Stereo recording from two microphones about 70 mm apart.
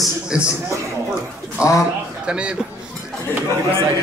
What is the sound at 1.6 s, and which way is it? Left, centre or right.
Speech, centre.